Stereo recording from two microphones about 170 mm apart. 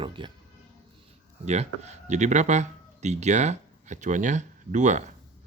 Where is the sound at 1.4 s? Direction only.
40° right (ahead or behind).